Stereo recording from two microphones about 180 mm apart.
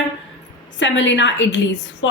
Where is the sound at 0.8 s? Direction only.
90° left.